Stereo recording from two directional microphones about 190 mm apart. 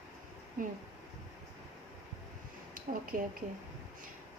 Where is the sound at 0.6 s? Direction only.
45° right (ahead or behind).